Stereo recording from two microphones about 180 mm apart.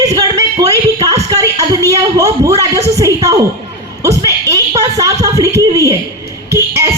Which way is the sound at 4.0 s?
15° right (ahead or behind).